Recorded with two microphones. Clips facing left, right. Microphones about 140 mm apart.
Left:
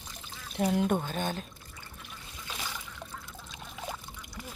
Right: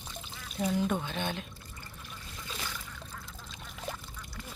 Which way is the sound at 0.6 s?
60° left (ahead or behind).